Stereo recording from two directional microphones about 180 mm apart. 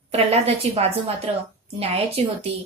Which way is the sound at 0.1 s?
35° right (ahead or behind).